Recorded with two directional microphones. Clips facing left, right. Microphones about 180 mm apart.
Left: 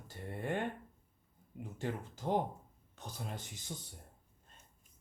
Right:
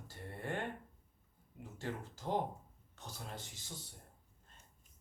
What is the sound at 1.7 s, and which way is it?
Speech, 15° left (ahead or behind).